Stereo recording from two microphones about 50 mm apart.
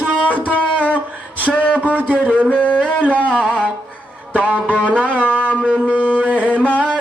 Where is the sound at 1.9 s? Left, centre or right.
Right.